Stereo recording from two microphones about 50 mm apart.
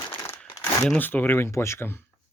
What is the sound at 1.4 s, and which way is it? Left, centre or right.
Speech, left.